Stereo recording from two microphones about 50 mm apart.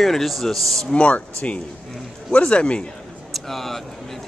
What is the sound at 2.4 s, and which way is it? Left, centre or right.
Speech, centre.